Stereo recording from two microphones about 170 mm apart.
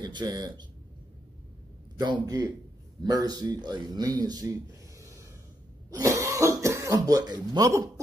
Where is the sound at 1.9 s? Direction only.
25° right (ahead or behind).